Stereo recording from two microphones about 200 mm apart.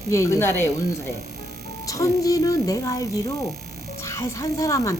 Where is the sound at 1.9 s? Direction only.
15° left (ahead or behind).